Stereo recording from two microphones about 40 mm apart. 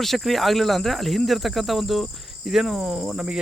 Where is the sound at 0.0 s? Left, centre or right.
Centre.